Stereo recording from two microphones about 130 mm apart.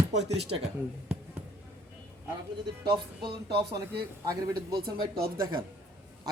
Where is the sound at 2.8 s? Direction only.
35° right (ahead or behind).